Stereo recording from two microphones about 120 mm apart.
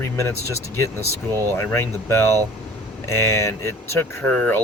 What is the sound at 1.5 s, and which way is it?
Speech, 20° left (ahead or behind).